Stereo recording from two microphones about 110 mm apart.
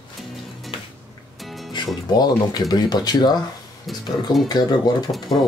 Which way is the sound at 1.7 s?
40° left (ahead or behind).